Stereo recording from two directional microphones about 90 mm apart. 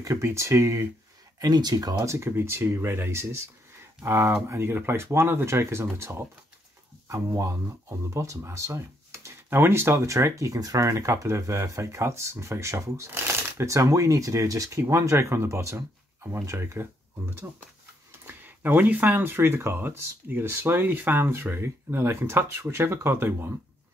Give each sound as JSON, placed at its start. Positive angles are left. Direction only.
{"t": 0.0, "sound": "speech", "side_deg": -30}
{"t": 1.4, "sound": "speech", "side_deg": -45}
{"t": 2.1, "sound": "speech", "side_deg": -30}
{"t": 18.2, "sound": "speech", "side_deg": -20}